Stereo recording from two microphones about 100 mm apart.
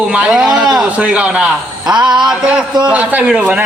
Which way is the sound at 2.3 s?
5° right (ahead or behind).